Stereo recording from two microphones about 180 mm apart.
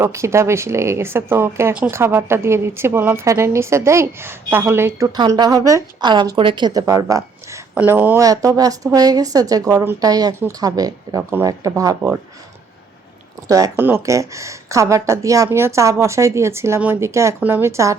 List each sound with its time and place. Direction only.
0.0 s speech: 15° right (ahead or behind)
13.5 s speech: 15° right (ahead or behind)